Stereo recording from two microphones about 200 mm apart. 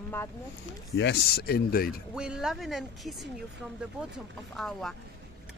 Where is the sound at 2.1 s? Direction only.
5° right (ahead or behind).